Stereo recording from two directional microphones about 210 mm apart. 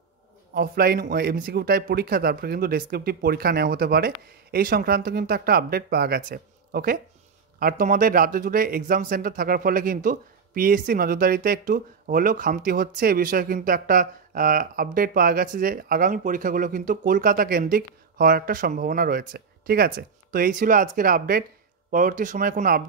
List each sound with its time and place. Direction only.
0.6 s a man's voice: 45° right (ahead or behind)